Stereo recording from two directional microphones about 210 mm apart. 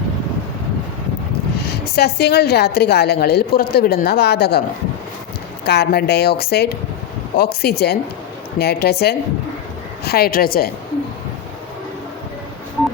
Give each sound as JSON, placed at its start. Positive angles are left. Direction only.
{"t": 1.6, "sound": "a woman's voice", "side_deg": 50}
{"t": 5.6, "sound": "a woman's voice", "side_deg": 50}